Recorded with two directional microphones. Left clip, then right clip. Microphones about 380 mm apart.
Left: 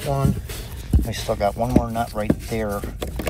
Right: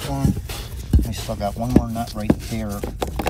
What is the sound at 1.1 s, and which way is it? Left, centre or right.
Speech, centre.